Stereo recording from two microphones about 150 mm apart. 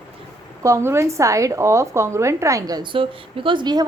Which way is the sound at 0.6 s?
20° right (ahead or behind).